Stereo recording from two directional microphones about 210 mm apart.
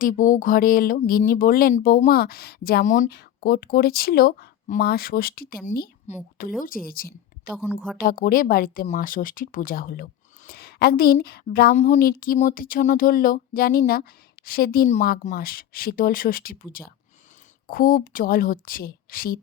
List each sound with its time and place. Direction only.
0.0 s a woman's voice: 40° left (ahead or behind)
7.5 s a woman's voice: 10° right (ahead or behind)
7.9 s speech: 40° left (ahead or behind)
17.7 s speech: 45° left (ahead or behind)